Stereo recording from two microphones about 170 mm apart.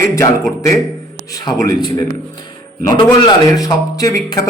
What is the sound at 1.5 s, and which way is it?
A man's voice, 25° left (ahead or behind).